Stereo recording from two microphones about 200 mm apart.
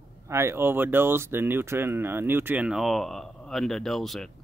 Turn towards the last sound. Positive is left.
turn(degrees=0)  # may be behind; listen again after turning